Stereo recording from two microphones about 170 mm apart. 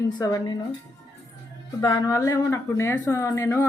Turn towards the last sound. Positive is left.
turn(degrees=15)  # may be behind; listen again after turning